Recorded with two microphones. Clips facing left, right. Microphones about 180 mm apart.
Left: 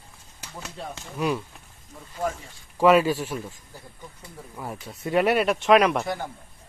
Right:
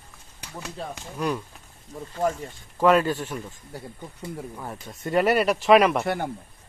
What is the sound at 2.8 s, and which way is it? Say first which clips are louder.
Speech: left 1 dB; 10° left (ahead or behind).